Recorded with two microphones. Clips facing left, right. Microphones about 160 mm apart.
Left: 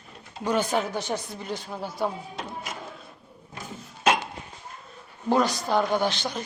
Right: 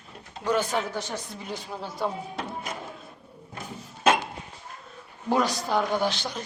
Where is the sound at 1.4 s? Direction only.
Centre (ahead or behind).